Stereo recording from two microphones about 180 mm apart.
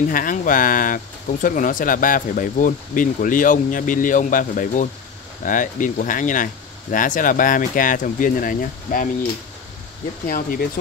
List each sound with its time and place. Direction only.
0.1 s speech: 50° left (ahead or behind)
10.2 s speech: 55° left (ahead or behind)